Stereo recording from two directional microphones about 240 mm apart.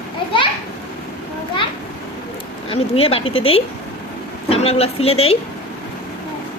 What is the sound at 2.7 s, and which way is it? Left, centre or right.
Speech, left.